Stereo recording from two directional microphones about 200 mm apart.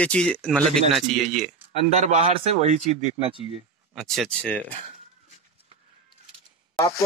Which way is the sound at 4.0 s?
Centre (ahead or behind).